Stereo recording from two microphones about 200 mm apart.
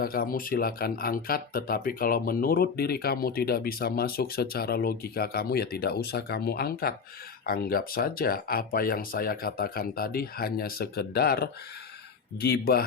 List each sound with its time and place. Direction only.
0.0 s speech: 45° left (ahead or behind)